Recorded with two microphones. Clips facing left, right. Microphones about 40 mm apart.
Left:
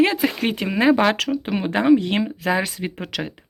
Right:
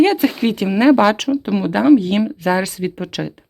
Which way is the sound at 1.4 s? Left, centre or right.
Left.